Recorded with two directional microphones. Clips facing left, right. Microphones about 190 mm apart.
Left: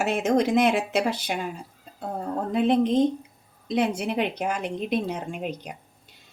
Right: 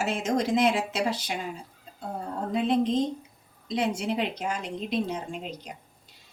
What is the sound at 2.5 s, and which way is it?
Speech, 60° left (ahead or behind).